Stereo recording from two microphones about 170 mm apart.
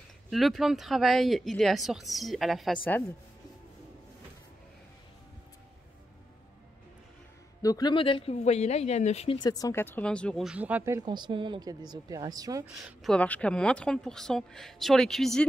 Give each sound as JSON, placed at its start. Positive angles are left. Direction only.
{"t": 0.3, "sound": "speech", "side_deg": 0}
{"t": 7.6, "sound": "speech", "side_deg": 20}
{"t": 9.4, "sound": "speech", "side_deg": 20}
{"t": 11.0, "sound": "speech", "side_deg": -25}
{"t": 12.6, "sound": "a woman's voice", "side_deg": -5}
{"t": 13.1, "sound": "speech", "side_deg": 10}